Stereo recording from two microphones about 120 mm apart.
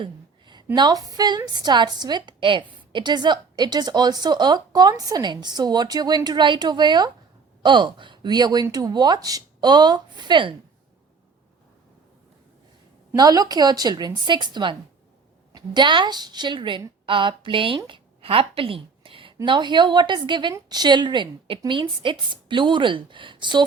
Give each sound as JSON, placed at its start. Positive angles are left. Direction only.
{"t": 0.0, "sound": "a woman's voice", "side_deg": -40}
{"t": 13.1, "sound": "a woman's voice", "side_deg": -30}